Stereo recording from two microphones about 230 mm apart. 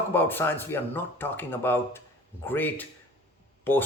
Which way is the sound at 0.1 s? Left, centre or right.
Centre.